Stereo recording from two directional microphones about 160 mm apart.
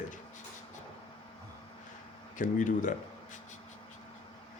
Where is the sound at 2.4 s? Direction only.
55° left (ahead or behind).